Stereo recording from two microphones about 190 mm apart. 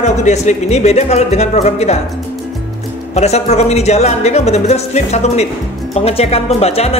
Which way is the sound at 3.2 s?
35° left (ahead or behind).